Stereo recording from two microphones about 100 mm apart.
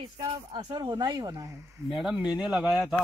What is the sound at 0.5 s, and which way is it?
Speech, 45° right (ahead or behind).